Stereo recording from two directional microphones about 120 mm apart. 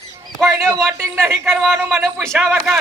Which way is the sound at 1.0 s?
20° right (ahead or behind).